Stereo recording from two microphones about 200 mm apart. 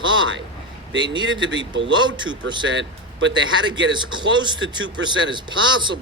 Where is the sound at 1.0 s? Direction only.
20° right (ahead or behind).